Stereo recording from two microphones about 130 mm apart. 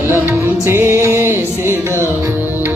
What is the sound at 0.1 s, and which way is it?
Music, 15° right (ahead or behind).